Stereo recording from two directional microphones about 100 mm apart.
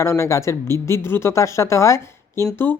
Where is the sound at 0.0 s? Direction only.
30° left (ahead or behind).